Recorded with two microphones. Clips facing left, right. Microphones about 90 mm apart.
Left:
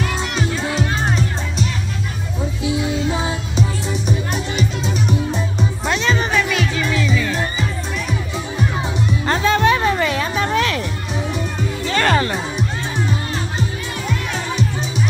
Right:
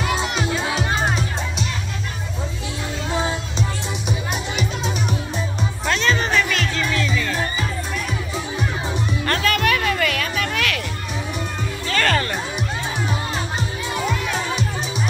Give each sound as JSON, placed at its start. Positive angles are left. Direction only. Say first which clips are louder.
{"t": 0.0, "sound": "music", "louder": "even", "side_deg": -5}
{"t": 3.2, "sound": "music", "louder": "left 2 dB", "side_deg": 5}
{"t": 5.9, "sound": "music", "louder": "even", "side_deg": 15}
{"t": 9.2, "sound": "music", "louder": "left 5 dB", "side_deg": 20}
{"t": 11.9, "sound": "music", "louder": "left 3 dB", "side_deg": 20}